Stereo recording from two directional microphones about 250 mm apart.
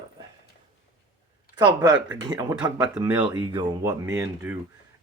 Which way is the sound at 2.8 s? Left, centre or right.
Centre.